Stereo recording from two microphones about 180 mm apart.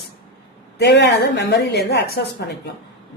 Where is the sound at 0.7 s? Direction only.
70° left (ahead or behind).